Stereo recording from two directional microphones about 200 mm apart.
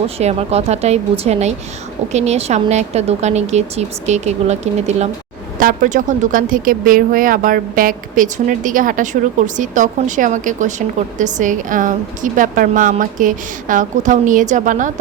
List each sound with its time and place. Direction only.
0.2 s speech: 30° right (ahead or behind)